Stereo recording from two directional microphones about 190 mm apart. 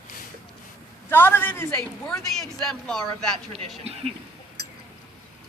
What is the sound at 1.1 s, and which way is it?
Speech, 10° left (ahead or behind).